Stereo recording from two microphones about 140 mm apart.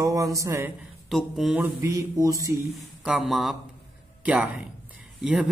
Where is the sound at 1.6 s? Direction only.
25° right (ahead or behind).